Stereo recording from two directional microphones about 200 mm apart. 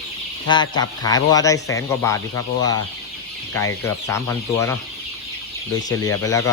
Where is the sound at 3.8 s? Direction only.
15° left (ahead or behind).